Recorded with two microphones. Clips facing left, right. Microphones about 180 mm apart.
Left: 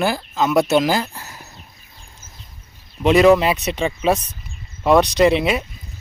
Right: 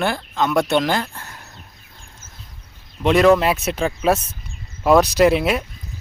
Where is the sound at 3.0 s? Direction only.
Centre (ahead or behind).